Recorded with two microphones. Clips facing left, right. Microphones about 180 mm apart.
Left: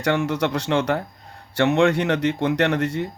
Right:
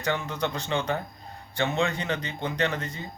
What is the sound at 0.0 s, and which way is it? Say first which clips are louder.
Speech: left 7 dB; 75° left (ahead or behind).